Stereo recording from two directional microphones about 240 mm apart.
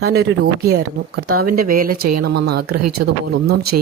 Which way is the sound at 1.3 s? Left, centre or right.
Right.